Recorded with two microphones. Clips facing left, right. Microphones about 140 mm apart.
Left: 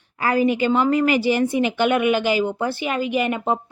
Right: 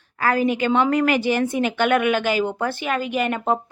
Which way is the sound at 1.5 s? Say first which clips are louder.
Left 2 dB; 50° right (ahead or behind).